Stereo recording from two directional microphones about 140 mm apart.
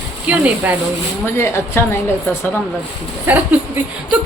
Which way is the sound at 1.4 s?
20° left (ahead or behind).